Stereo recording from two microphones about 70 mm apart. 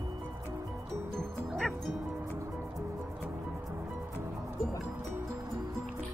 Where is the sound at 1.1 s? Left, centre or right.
Centre.